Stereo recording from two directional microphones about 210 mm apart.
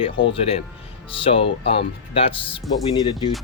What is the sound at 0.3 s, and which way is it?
Speech, 25° left (ahead or behind).